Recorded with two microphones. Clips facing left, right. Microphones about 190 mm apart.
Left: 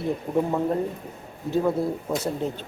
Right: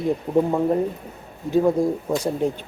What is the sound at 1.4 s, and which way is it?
Speech, 15° right (ahead or behind).